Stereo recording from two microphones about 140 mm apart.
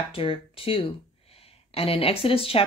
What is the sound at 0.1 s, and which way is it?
Speech, 40° left (ahead or behind).